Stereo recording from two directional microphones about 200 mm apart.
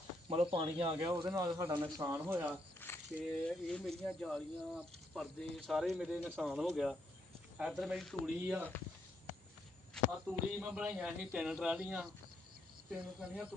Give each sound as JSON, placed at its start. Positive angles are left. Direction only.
{"t": 0.3, "sound": "speech", "side_deg": -30}
{"t": 1.2, "sound": "speech", "side_deg": -10}
{"t": 2.8, "sound": "a sound", "side_deg": 10}
{"t": 3.4, "sound": "speech", "side_deg": 5}
{"t": 10.1, "sound": "speech", "side_deg": -5}